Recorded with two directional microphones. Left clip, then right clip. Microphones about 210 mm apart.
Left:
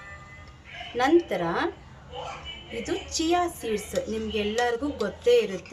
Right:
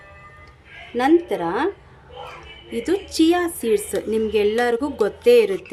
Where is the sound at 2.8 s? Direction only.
50° right (ahead or behind).